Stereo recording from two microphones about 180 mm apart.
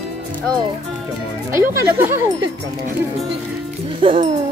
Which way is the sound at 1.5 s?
15° right (ahead or behind).